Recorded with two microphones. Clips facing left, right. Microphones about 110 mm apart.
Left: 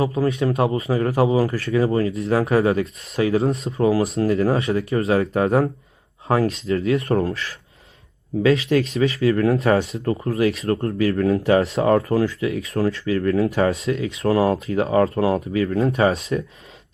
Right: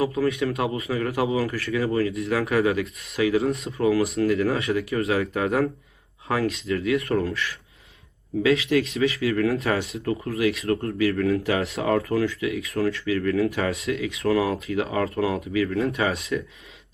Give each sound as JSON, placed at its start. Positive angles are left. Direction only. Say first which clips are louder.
{"t": 0.0, "sound": "speech", "louder": "left 3 dB", "side_deg": 30}
{"t": 8.4, "sound": "speech", "louder": "left 3 dB", "side_deg": 35}